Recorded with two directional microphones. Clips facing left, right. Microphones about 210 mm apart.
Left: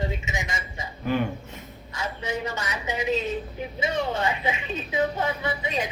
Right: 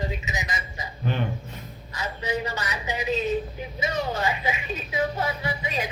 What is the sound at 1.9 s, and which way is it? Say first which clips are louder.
A woman's voice: right 1 dB; 25° left (ahead or behind).